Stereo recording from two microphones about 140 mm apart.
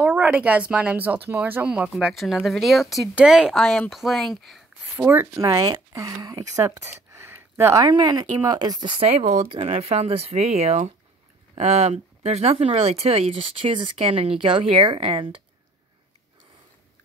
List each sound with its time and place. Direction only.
0.0 s speech: 10° right (ahead or behind)
4.9 s speech: 15° right (ahead or behind)
7.8 s speech: 30° right (ahead or behind)